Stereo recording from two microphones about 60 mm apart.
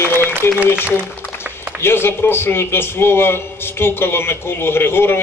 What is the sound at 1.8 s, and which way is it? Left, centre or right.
A man's voice, left.